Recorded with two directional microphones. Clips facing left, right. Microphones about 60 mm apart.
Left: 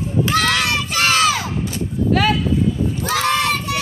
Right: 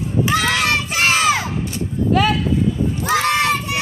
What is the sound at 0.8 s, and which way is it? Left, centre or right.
Crowd, right.